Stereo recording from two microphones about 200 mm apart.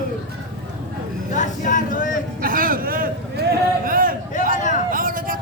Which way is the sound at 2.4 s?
45° right (ahead or behind).